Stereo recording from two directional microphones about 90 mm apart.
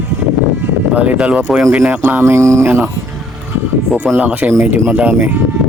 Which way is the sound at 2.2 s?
35° right (ahead or behind).